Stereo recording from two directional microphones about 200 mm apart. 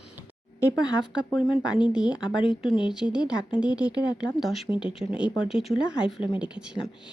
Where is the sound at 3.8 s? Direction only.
20° left (ahead or behind).